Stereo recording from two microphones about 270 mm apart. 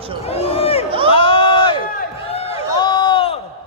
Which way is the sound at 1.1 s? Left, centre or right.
Centre.